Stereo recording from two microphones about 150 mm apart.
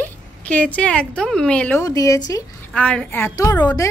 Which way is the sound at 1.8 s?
20° left (ahead or behind).